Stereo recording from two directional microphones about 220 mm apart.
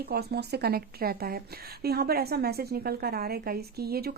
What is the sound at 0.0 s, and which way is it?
A woman's voice, 45° right (ahead or behind).